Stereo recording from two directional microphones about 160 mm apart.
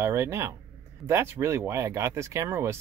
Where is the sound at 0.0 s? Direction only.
15° right (ahead or behind).